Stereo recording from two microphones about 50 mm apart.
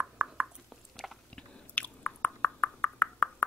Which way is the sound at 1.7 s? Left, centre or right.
Left.